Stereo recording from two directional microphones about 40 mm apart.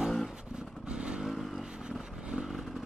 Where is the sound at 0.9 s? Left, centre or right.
Right.